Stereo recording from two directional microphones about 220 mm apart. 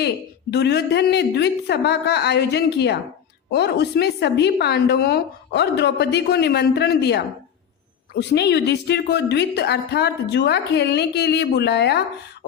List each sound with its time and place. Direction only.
0.5 s a woman's voice: 50° left (ahead or behind)